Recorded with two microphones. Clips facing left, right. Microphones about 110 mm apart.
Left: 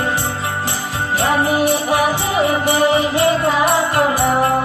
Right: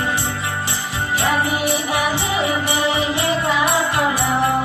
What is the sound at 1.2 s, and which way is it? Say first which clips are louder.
Music: left 5 dB; 45° left (ahead or behind).